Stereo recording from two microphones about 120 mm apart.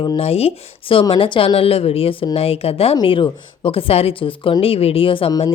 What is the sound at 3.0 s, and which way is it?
Speech, 45° left (ahead or behind).